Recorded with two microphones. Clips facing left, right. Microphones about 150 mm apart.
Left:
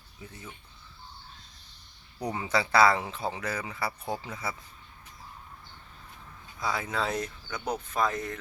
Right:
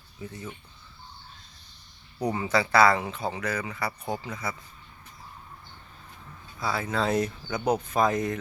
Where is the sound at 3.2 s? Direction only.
20° right (ahead or behind).